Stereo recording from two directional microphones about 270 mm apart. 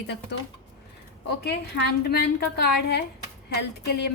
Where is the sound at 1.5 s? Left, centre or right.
Left.